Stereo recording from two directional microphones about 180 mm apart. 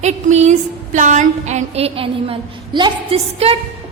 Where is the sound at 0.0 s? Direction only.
40° right (ahead or behind).